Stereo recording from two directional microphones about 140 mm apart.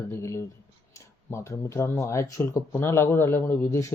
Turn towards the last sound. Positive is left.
turn(degrees=15)  # may be behind; listen again after turning